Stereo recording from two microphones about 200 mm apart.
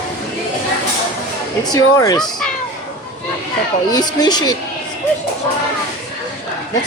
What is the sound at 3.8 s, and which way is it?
Speech, 20° left (ahead or behind).